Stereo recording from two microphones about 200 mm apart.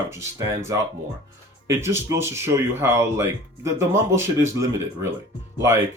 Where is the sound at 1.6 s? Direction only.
15° right (ahead or behind).